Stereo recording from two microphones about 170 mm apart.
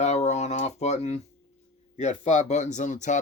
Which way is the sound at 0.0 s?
40° left (ahead or behind).